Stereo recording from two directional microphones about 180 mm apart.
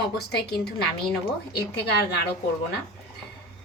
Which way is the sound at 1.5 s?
65° left (ahead or behind).